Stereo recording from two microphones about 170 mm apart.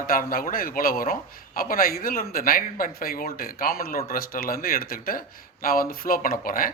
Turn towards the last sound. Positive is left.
turn(degrees=55)  # may be behind; listen again after turning